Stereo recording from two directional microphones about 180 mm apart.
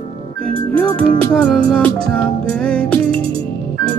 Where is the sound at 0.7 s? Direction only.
5° left (ahead or behind).